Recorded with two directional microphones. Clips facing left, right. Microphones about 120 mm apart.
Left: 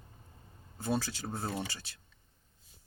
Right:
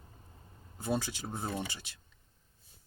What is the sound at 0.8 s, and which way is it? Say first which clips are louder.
Speech: even; 15° right (ahead or behind).